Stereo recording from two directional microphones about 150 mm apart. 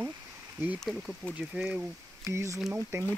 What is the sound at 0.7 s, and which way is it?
Speech, centre (ahead or behind).